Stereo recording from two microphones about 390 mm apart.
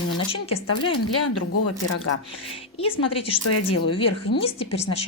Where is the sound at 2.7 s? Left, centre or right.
Centre.